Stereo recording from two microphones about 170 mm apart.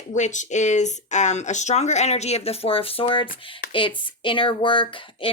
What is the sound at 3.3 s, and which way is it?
Speech, 60° left (ahead or behind).